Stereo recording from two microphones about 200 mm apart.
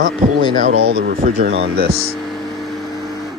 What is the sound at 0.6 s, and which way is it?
Speech, 30° right (ahead or behind).